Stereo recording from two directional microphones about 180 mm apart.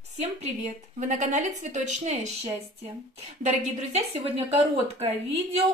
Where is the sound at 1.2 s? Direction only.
40° right (ahead or behind).